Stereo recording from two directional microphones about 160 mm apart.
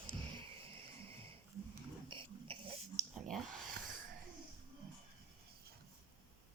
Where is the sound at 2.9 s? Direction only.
45° right (ahead or behind).